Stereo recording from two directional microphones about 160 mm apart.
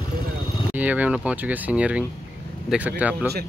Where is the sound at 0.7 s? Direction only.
10° right (ahead or behind).